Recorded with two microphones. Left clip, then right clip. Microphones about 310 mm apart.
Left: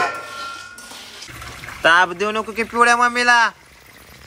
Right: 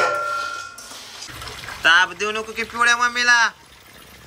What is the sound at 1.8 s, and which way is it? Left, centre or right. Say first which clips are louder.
A man's voice: left 1 dB; centre.